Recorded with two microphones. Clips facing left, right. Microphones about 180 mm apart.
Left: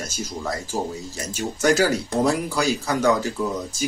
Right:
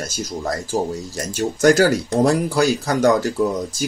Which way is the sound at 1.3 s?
45° right (ahead or behind).